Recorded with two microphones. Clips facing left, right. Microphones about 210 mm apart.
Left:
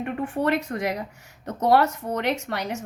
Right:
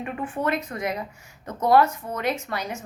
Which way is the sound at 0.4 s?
70° left (ahead or behind).